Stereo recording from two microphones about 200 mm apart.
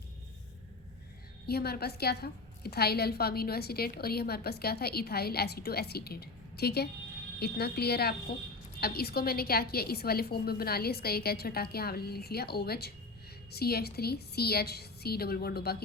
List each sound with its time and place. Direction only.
1.5 s a woman's voice: 50° left (ahead or behind)